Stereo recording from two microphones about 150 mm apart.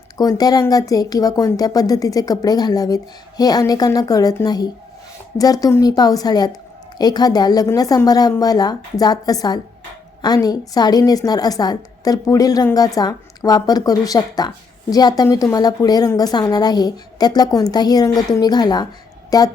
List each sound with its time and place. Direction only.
0.2 s a woman's voice: 25° left (ahead or behind)